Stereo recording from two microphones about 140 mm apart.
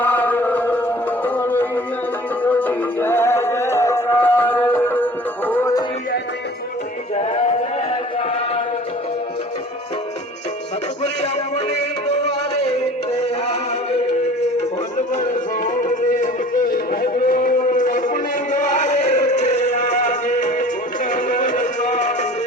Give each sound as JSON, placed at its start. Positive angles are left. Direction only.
{"t": 0.0, "sound": "chant", "side_deg": 10}
{"t": 2.4, "sound": "music", "side_deg": 15}
{"t": 7.2, "sound": "music", "side_deg": 50}
{"t": 7.9, "sound": "a sound", "side_deg": 45}
{"t": 13.1, "sound": "music", "side_deg": 45}
{"t": 15.1, "sound": "music", "side_deg": 70}